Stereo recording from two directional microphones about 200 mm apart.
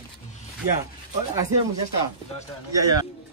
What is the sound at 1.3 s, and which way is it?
A man's voice, 15° right (ahead or behind).